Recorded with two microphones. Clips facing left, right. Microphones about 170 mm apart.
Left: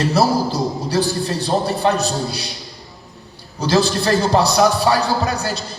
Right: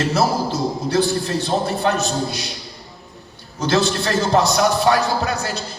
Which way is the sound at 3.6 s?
35° left (ahead or behind).